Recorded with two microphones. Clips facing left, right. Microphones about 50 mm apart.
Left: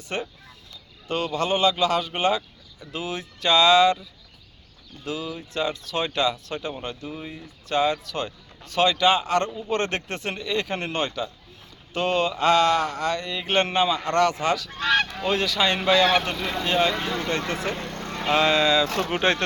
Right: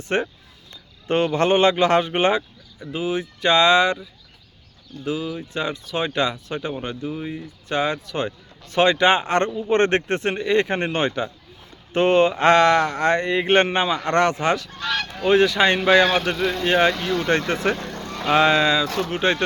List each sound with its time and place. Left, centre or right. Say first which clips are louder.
0.1 s a man's voice: right 7 dB; right
2.8 s speech: right 6 dB; centre
5.0 s speech: right 5 dB; centre
7.7 s a man's voice: even; right
14.7 s goose: left 4 dB; left
15.3 s speech: right 8 dB; right
16.2 s speech: right 6 dB; centre
16.6 s a man's voice: right 4 dB; right
16.9 s goose: right 3 dB; left
17.5 s a man's voice: right 6 dB; right
18.3 s speech: right 3 dB; right
19.2 s speech: right 2 dB; centre